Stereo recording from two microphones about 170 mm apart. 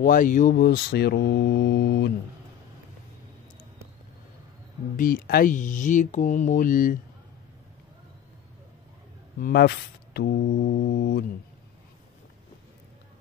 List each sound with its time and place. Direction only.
0.0 s speech: 55° left (ahead or behind); by 2.1 s 75° left (ahead or behind)
4.9 s speech: 55° left (ahead or behind)
9.4 s speech: 70° left (ahead or behind)